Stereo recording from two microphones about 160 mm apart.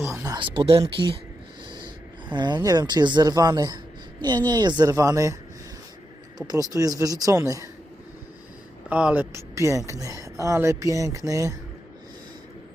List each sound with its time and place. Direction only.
0.0 s a sound: 15° right (ahead or behind)
0.3 s speech: 35° right (ahead or behind)
2.3 s speech: 25° right (ahead or behind)
6.5 s speech: 20° right (ahead or behind)
8.9 s speech: 10° right (ahead or behind)
9.3 s speech: 20° right (ahead or behind)